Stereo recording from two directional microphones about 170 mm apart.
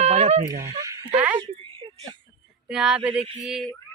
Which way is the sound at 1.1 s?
10° right (ahead or behind).